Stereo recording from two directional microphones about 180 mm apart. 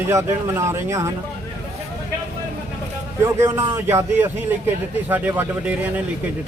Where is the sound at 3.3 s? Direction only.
15° right (ahead or behind).